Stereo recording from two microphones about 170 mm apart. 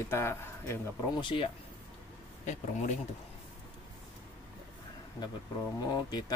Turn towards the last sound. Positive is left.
turn(degrees=25)  # may be behind; listen again after turning